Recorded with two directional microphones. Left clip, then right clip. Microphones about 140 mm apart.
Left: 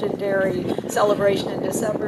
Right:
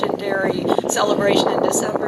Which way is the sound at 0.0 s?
20° right (ahead or behind).